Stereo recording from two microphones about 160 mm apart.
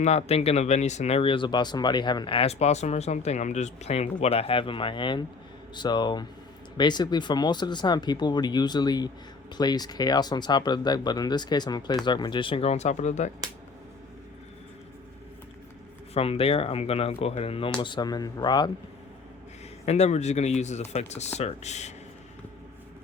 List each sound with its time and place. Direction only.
0.0 s speech: 40° left (ahead or behind)
16.1 s speech: 40° left (ahead or behind)
19.8 s speech: 45° left (ahead or behind)